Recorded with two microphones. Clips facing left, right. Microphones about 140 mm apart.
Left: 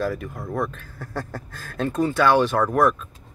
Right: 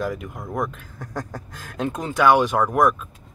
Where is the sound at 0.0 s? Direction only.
15° right (ahead or behind).